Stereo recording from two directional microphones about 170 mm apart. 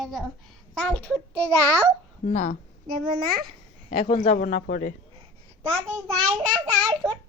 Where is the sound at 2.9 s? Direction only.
60° right (ahead or behind).